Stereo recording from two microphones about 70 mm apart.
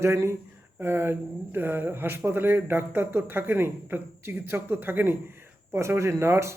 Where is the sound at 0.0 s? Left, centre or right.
Right.